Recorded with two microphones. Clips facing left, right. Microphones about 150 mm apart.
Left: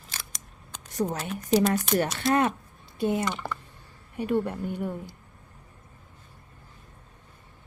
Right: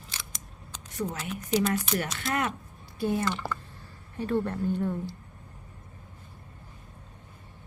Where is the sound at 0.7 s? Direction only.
40° left (ahead or behind).